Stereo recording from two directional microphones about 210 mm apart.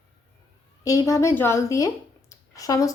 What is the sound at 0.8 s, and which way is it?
A woman's voice, 15° left (ahead or behind).